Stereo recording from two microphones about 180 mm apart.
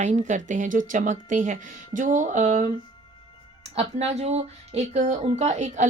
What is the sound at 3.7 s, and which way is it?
Speech, 35° right (ahead or behind).